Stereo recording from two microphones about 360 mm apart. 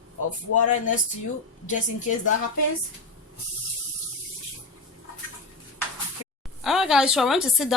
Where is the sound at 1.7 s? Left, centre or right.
Left.